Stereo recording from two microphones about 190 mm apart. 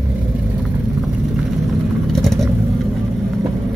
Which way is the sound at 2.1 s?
Centre (ahead or behind).